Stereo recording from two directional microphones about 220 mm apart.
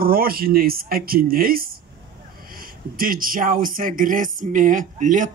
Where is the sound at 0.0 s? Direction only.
40° right (ahead or behind).